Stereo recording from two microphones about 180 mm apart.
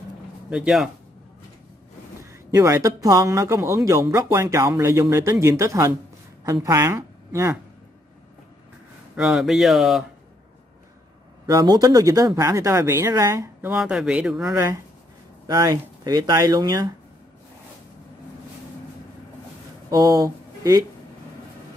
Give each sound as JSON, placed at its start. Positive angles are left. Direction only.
{"t": 0.5, "sound": "speech", "side_deg": -5}
{"t": 2.5, "sound": "a woman's voice", "side_deg": -15}
{"t": 9.1, "sound": "speech", "side_deg": 0}
{"t": 11.4, "sound": "speech", "side_deg": -20}
{"t": 15.4, "sound": "speech", "side_deg": -20}
{"t": 19.9, "sound": "speech", "side_deg": -20}